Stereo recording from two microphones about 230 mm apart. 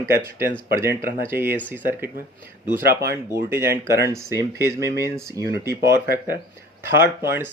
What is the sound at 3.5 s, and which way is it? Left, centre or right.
Speech, centre.